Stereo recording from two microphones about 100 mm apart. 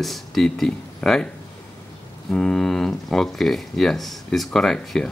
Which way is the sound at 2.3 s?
5° left (ahead or behind).